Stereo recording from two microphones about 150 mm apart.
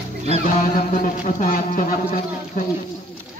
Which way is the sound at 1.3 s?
65° left (ahead or behind).